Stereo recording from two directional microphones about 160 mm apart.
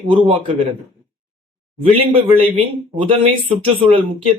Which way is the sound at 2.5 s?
35° right (ahead or behind).